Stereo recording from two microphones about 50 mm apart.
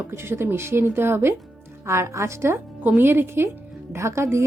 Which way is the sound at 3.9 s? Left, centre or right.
Right.